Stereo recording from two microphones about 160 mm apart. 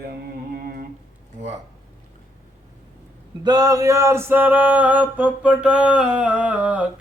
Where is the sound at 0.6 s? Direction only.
65° right (ahead or behind).